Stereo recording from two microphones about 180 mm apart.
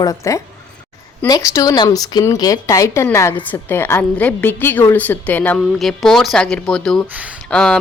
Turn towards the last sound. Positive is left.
turn(degrees=5)  # may be behind; listen again after turning